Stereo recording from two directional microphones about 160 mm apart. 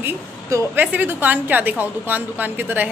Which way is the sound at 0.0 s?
15° right (ahead or behind).